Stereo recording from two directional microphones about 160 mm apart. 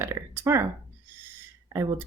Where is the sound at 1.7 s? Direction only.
15° right (ahead or behind).